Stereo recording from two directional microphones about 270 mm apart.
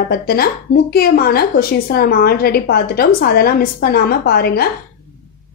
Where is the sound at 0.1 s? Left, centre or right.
Left.